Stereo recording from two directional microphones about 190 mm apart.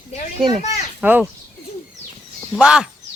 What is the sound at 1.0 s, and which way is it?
Speech, 10° right (ahead or behind).